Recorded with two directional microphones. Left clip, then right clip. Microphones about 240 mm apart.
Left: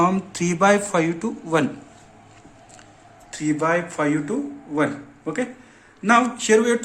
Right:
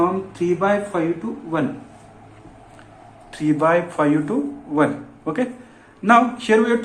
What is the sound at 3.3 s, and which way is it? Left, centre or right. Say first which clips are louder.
A man's voice: right 4 dB; left.